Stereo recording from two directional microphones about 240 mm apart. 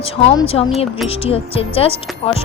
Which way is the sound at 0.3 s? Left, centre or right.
Left.